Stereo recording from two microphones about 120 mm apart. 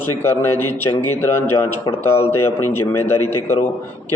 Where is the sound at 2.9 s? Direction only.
20° left (ahead or behind).